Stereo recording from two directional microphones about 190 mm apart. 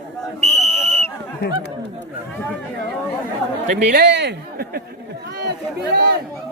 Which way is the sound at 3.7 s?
60° right (ahead or behind).